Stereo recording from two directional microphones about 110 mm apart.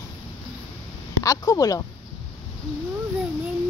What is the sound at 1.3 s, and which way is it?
Speech, 30° left (ahead or behind).